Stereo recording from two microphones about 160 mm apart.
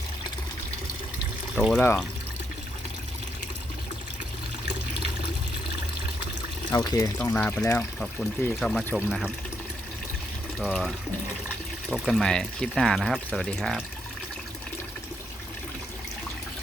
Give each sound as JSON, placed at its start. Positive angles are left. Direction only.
{"t": 1.5, "sound": "speech", "side_deg": 5}
{"t": 6.7, "sound": "speech", "side_deg": 25}
{"t": 7.9, "sound": "speech", "side_deg": 5}
{"t": 9.0, "sound": "speech", "side_deg": -5}
{"t": 10.6, "sound": "speech", "side_deg": 0}
{"t": 11.9, "sound": "speech", "side_deg": 0}